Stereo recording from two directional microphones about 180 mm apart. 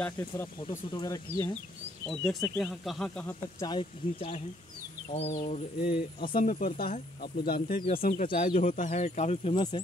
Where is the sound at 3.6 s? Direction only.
25° left (ahead or behind); by 7.6 s 60° left (ahead or behind).